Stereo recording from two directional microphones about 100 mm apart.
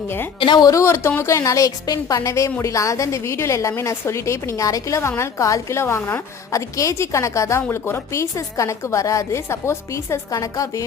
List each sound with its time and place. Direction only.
0.3 s a woman's voice: 50° left (ahead or behind)
0.8 s a woman's voice: 25° left (ahead or behind)